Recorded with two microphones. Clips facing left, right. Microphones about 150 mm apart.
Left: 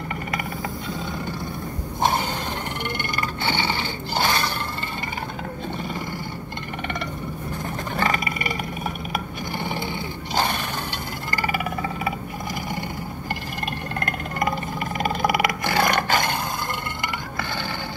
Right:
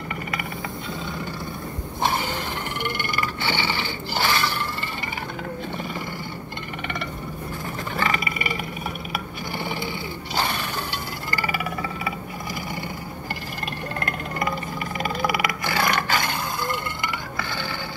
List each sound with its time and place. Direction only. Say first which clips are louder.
2.0 s mechanisms: left 2 dB; 45° left (ahead or behind)
4.1 s mechanisms: left 1 dB; 45° left (ahead or behind)
7.9 s vehicle: left 2 dB; 45° left (ahead or behind)
10.3 s mechanisms: left 2 dB; 50° left (ahead or behind)
11.3 s a sound: left 2 dB; 45° left (ahead or behind)
15.0 s roar: left 3 dB; 45° left (ahead or behind)